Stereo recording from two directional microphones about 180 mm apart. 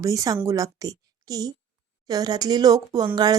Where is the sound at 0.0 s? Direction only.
15° right (ahead or behind).